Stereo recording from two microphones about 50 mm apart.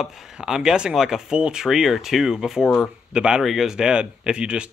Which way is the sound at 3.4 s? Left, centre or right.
Centre.